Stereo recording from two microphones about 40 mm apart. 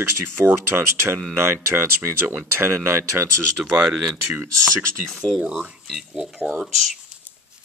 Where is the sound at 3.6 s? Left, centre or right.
Centre.